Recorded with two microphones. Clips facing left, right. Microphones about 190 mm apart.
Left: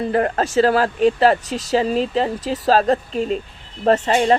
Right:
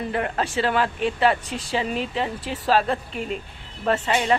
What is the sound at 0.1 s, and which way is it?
Speech, 40° left (ahead or behind).